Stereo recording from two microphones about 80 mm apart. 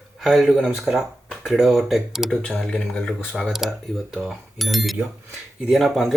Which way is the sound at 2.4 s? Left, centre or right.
Centre.